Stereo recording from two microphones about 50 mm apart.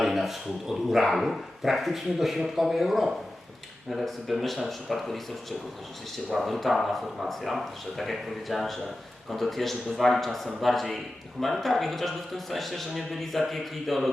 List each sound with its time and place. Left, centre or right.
0.0 s a man's voice: centre